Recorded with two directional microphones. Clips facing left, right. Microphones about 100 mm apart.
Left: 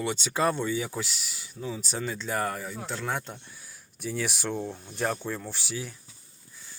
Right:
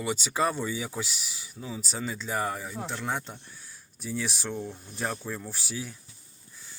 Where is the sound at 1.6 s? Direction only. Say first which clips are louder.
Left 3 dB; 15° right (ahead or behind).